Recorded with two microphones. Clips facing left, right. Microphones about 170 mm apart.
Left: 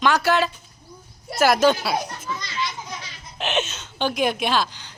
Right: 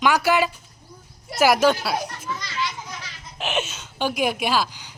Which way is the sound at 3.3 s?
5° right (ahead or behind).